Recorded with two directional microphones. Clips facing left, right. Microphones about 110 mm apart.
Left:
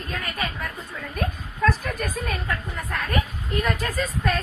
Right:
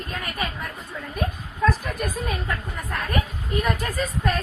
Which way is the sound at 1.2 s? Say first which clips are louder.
Even; 15° right (ahead or behind).